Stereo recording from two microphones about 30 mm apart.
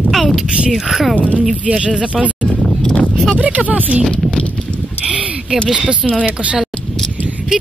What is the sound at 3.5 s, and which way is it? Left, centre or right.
Speech, right.